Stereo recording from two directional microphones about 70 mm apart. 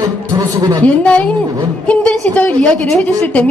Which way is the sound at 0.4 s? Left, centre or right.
Right.